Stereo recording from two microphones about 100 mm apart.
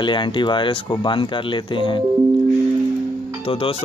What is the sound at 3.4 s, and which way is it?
Speech, 70° left (ahead or behind).